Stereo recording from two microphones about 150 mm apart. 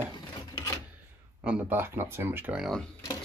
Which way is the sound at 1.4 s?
10° right (ahead or behind).